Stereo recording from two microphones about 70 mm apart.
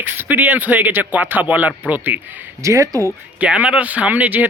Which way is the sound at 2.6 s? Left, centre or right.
Right.